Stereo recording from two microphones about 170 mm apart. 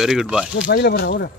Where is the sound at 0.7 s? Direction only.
70° left (ahead or behind).